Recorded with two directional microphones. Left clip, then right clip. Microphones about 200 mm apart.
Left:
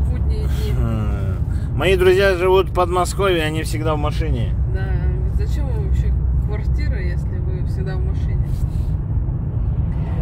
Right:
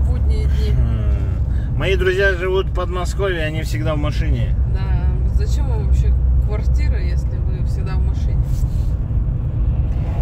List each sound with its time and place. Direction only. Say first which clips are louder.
1.8 s speech: left 3 dB; 40° left (ahead or behind)